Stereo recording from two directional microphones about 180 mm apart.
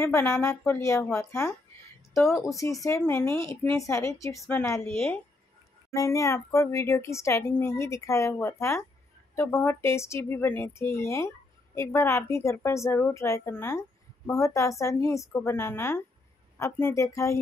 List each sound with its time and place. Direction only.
0.0 s speech: 15° left (ahead or behind)